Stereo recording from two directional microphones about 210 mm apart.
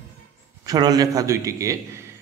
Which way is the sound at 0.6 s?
20° right (ahead or behind).